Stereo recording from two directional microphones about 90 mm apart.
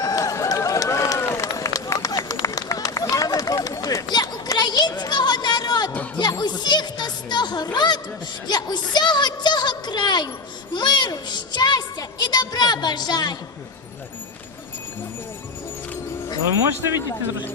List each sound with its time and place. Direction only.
0.0 s run: 40° left (ahead or behind)
6.1 s music: 55° left (ahead or behind)
8.4 s a woman's voice: 55° left (ahead or behind)
10.7 s a sound: 55° left (ahead or behind)